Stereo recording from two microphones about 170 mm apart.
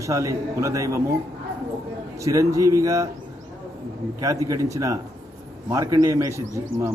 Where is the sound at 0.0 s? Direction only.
20° right (ahead or behind).